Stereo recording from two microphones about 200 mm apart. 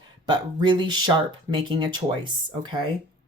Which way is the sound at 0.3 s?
25° right (ahead or behind).